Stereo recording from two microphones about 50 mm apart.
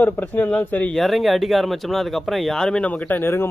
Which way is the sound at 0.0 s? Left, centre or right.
Left.